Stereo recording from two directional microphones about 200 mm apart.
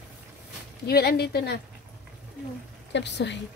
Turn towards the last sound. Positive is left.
turn(degrees=60)  # may be behind; listen again after turning